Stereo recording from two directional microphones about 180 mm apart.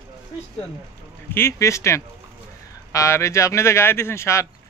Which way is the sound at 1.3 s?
15° left (ahead or behind).